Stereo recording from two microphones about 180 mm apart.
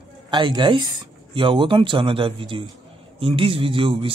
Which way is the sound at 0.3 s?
25° right (ahead or behind).